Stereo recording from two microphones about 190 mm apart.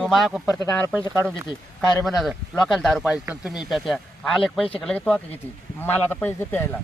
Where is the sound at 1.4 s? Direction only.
20° left (ahead or behind).